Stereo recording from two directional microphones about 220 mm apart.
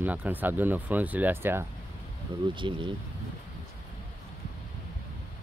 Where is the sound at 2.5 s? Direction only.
20° right (ahead or behind).